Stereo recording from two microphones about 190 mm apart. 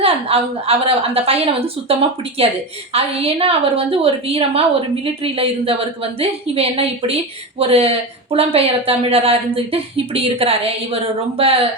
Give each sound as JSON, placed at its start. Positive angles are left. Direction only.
{"t": 0.0, "sound": "speech", "side_deg": -30}